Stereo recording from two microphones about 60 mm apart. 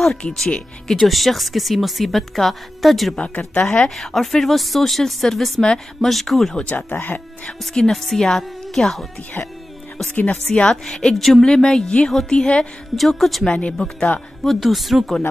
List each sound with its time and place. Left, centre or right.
0.0 s speech: centre
3.2 s speech: centre
6.5 s speech: left
7.4 s speech: centre
10.1 s speech: left
10.5 s speech: centre
12.9 s speech: centre
13.5 s speech: centre
14.4 s speech: centre